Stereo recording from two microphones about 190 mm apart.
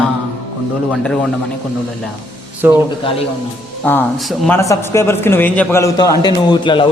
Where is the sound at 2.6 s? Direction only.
10° right (ahead or behind).